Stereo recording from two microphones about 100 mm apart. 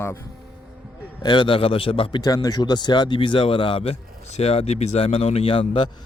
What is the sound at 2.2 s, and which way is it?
Speech, 40° left (ahead or behind).